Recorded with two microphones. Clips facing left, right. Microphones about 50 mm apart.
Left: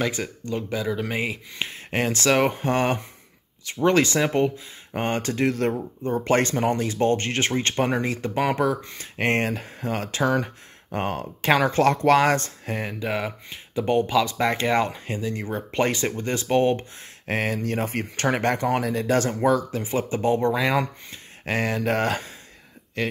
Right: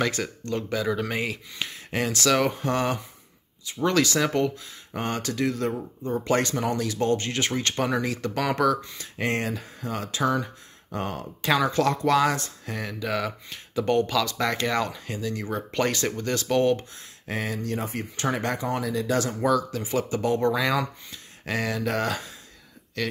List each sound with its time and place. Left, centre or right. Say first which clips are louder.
0.0 s speech: even; centre
8.8 s speech: left 4 dB; left
17.3 s speech: left 4 dB; left
20.8 s speech: left 1 dB; left